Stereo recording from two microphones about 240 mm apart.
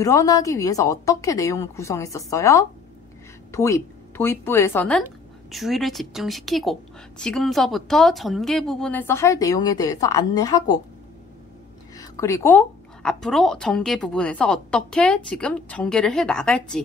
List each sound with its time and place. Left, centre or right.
0.0 s a woman's voice: centre
12.0 s a woman's voice: centre